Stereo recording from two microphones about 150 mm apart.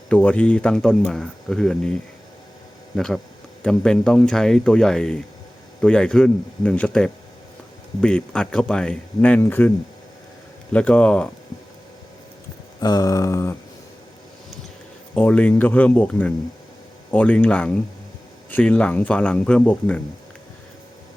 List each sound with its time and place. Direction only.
0.1 s speech: 10° left (ahead or behind)
12.8 s a sound: 25° left (ahead or behind)
15.1 s speech: 10° left (ahead or behind)